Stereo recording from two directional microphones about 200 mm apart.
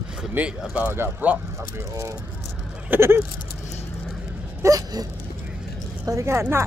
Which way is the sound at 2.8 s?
10° right (ahead or behind).